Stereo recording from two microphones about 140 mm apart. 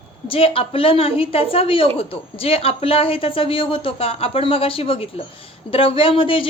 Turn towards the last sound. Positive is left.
turn(degrees=40)  # may be behind; listen again after turning